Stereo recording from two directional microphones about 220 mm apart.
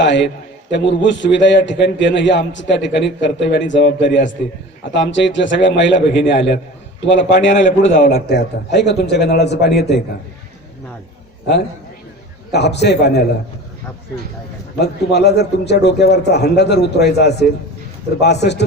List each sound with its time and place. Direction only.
0.0 s a man's voice: 55° left (ahead or behind)
7.9 s a man's voice: 35° left (ahead or behind)
8.3 s a man's voice: 50° left (ahead or behind)
12.5 s a man's voice: 50° left (ahead or behind)
14.8 s a man's voice: 50° left (ahead or behind)